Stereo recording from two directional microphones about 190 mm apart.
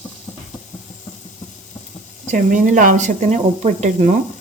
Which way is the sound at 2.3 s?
40° right (ahead or behind).